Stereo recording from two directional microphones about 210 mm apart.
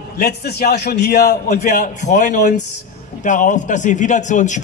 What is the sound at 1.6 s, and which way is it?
A man's voice, 35° left (ahead or behind).